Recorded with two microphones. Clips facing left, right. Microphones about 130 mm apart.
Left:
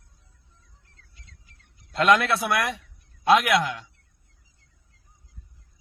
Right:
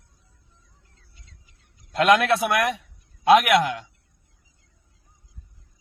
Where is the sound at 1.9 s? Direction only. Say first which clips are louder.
Right 2 dB; 45° right (ahead or behind).